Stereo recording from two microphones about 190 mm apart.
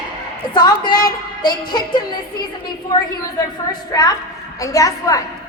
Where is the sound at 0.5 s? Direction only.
25° left (ahead or behind).